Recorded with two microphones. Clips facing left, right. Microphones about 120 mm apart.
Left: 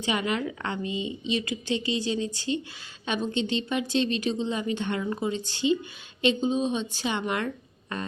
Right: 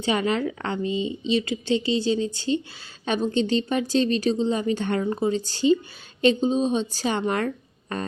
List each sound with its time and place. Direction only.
0.0 s a woman's voice: 35° right (ahead or behind)